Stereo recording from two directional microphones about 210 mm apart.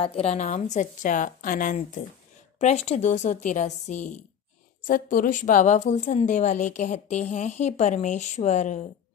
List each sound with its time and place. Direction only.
0.0 s a woman's voice: 30° left (ahead or behind)